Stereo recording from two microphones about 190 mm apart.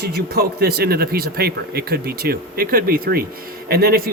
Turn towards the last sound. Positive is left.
turn(degrees=-50)  # may be behind; listen again after turning